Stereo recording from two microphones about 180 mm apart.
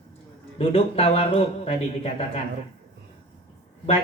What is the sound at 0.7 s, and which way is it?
Speech, 30° left (ahead or behind).